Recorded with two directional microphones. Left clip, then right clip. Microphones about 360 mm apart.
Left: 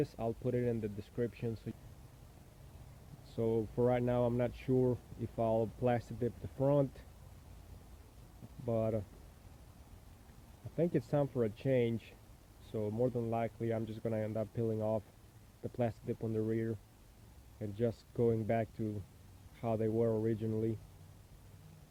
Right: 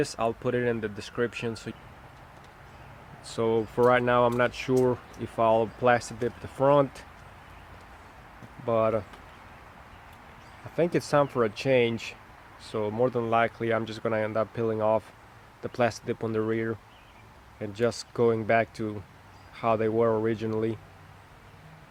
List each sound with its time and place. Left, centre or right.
0.2 s speech: right
3.4 s speech: right
8.6 s speech: right
10.8 s speech: right
11.9 s speech: centre
12.8 s speech: right